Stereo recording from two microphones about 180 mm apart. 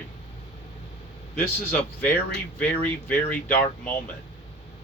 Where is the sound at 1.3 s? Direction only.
10° left (ahead or behind).